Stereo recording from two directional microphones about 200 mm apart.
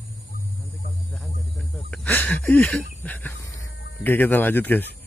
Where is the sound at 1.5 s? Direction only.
Centre (ahead or behind).